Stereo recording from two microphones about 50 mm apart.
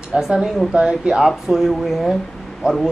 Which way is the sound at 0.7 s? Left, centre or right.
Centre.